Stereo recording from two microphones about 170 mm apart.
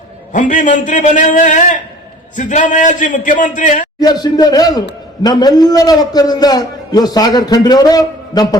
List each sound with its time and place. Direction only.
0.3 s a man's voice: 50° left (ahead or behind)
4.0 s a man's voice: 25° left (ahead or behind)